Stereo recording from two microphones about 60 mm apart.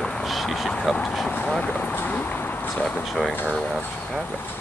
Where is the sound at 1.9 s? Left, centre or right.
Left.